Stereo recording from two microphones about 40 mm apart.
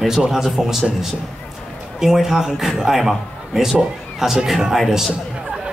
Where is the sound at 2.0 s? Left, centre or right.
Centre.